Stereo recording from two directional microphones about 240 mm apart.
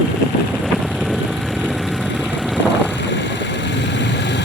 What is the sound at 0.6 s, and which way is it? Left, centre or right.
Vehicle, centre.